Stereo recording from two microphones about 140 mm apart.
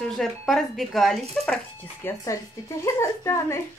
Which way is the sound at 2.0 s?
20° left (ahead or behind).